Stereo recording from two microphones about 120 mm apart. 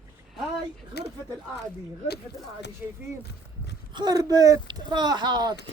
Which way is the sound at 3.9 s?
35° right (ahead or behind).